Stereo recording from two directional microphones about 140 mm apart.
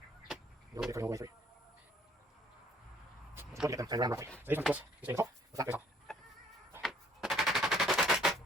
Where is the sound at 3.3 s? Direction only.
20° right (ahead or behind).